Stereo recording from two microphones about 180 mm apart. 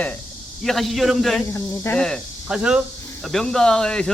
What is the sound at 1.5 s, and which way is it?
Speech, 10° left (ahead or behind).